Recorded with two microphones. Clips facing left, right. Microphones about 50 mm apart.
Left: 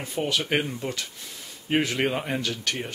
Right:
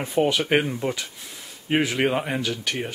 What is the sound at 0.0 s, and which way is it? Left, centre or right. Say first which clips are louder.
Speech: right 6 dB; right.